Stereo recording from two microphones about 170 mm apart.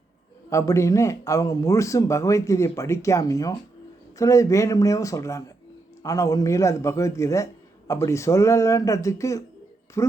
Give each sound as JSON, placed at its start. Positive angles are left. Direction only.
{"t": 0.5, "sound": "speech", "side_deg": 15}